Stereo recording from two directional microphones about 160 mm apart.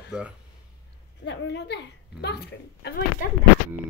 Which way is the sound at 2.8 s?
65° left (ahead or behind).